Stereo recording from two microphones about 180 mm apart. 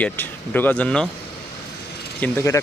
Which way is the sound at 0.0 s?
10° left (ahead or behind).